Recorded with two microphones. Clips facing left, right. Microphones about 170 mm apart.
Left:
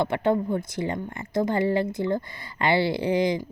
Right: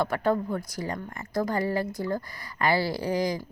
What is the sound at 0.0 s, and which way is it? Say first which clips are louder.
Speech: left 2 dB; 25° left (ahead or behind).